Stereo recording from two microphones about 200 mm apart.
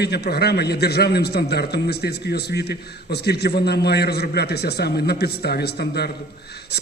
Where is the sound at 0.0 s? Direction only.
55° left (ahead or behind).